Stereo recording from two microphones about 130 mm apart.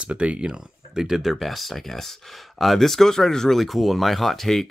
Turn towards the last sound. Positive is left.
turn(degrees=0)  # may be behind; listen again after turning